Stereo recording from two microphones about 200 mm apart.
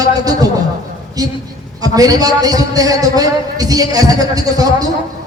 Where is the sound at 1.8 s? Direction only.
20° right (ahead or behind).